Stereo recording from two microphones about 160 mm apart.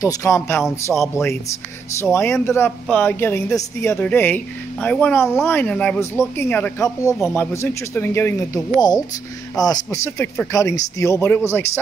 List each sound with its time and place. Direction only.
0.0 s speech: 20° left (ahead or behind)
2.4 s speech: 15° left (ahead or behind)
8.7 s speech: 25° left (ahead or behind)